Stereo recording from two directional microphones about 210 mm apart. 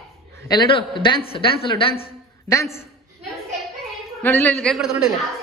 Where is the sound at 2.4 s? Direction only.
15° left (ahead or behind).